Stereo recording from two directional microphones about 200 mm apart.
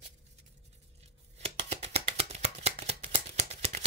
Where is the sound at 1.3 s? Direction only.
30° right (ahead or behind).